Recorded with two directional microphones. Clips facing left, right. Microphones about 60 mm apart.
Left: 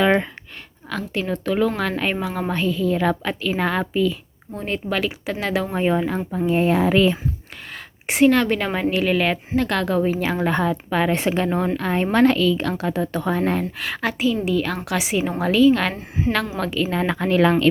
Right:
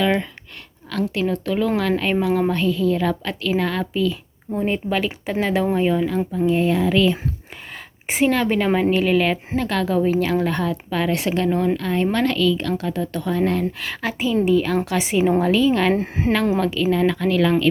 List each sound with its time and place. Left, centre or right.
0.0 s a sound: left
0.9 s a woman's voice: centre
4.5 s speech: centre
5.7 s a woman's voice: left
6.9 s a woman's voice: left
7.7 s a woman's voice: centre
10.0 s a woman's voice: centre
13.7 s a woman's voice: centre
16.0 s speech: right
16.6 s speech: centre
16.9 s a woman's voice: centre
17.2 s speech: left